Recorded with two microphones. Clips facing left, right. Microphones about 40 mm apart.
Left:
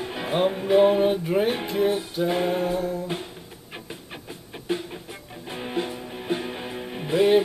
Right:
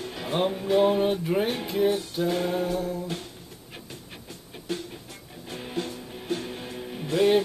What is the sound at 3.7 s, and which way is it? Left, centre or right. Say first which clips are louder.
Music: left 5 dB; left.